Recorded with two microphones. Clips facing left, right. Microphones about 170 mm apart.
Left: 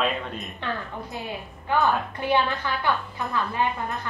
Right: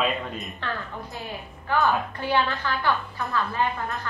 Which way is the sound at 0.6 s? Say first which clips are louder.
Left 3 dB; 20° left (ahead or behind).